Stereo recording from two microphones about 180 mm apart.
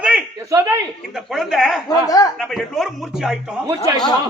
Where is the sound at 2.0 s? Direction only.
20° left (ahead or behind).